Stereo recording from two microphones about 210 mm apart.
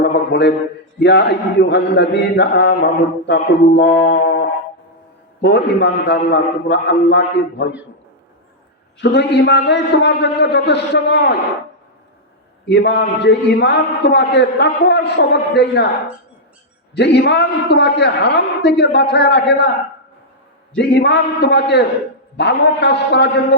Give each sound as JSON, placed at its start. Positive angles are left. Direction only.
{"t": 0.0, "sound": "a sound", "side_deg": 55}
{"t": 0.9, "sound": "a man's voice", "side_deg": 55}
{"t": 9.0, "sound": "a man's voice", "side_deg": 55}
{"t": 12.6, "sound": "a man's voice", "side_deg": 55}
{"t": 16.9, "sound": "a man's voice", "side_deg": 55}
{"t": 20.7, "sound": "a man's voice", "side_deg": 55}